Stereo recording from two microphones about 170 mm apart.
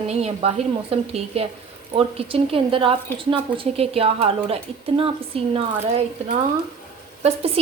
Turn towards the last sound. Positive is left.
turn(degrees=-35)  # may be behind; listen again after turning